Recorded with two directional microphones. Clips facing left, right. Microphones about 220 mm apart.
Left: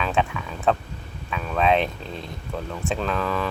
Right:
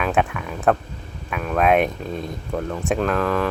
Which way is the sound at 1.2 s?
10° right (ahead or behind).